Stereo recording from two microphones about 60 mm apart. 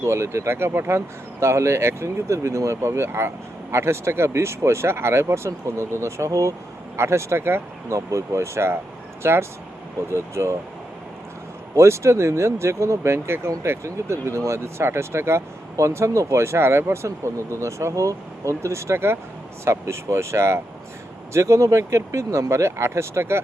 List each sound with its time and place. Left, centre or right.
0.0 s speech: right
7.9 s speech: right
11.7 s speech: right